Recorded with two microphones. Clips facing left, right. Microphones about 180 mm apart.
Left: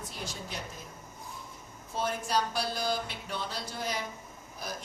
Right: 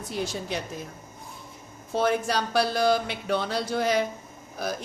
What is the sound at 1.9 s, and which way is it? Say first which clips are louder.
Mantra: right 6 dB; 75° right (ahead or behind).